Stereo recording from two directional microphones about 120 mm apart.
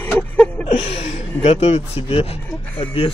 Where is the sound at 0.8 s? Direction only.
55° left (ahead or behind).